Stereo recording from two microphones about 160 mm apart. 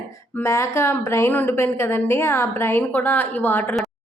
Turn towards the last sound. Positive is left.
turn(degrees=10)  # may be behind; listen again after turning